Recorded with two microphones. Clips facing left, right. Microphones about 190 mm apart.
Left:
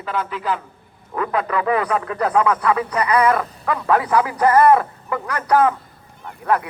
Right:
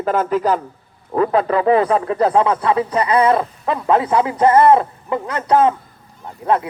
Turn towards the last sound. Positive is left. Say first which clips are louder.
# right 2 dB
turn(degrees=-25)  # may be behind; listen again after turning